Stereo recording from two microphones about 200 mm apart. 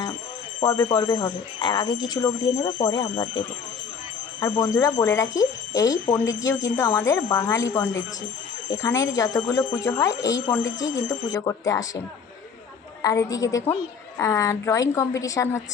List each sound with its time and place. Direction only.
0.6 s speech: 20° left (ahead or behind)
13.0 s speech: 20° left (ahead or behind)